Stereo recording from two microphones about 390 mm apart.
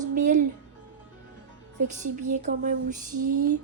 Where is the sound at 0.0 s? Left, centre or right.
Centre.